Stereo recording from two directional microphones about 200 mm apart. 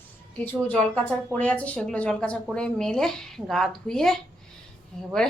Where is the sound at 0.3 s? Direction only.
5° left (ahead or behind).